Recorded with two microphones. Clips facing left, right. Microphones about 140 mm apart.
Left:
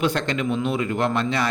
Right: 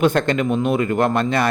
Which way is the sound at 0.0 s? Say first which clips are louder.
Right 6 dB; 50° right (ahead or behind).